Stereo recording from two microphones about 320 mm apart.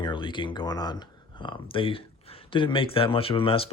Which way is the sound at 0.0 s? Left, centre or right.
Centre.